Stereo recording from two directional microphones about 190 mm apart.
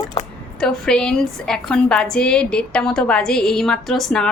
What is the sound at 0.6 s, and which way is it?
A woman's voice, 5° left (ahead or behind).